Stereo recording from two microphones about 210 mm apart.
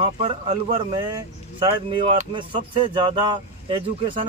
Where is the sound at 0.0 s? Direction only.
30° right (ahead or behind).